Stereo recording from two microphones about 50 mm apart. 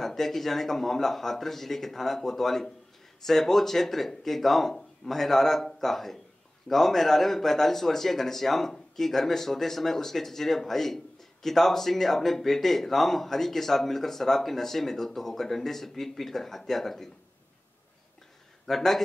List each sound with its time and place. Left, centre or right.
0.0 s speech: centre
18.7 s speech: centre